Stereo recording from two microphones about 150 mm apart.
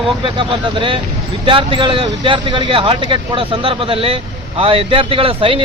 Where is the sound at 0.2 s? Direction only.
35° right (ahead or behind).